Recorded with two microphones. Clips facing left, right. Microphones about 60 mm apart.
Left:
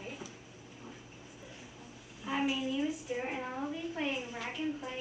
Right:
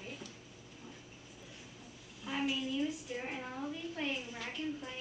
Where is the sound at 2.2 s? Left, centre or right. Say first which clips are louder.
Left 3 dB; centre.